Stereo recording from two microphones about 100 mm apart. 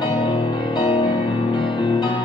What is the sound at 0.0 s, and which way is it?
Music, 50° left (ahead or behind).